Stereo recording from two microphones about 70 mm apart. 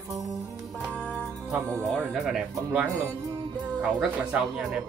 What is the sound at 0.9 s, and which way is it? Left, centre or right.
Music, centre.